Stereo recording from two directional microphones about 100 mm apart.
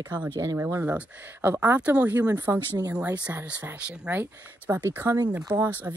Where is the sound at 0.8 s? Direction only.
15° right (ahead or behind).